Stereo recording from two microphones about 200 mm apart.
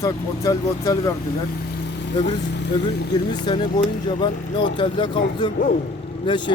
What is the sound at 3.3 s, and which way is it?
Speech, 25° left (ahead or behind).